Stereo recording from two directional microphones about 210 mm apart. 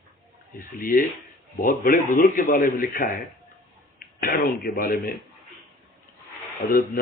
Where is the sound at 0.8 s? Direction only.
40° left (ahead or behind).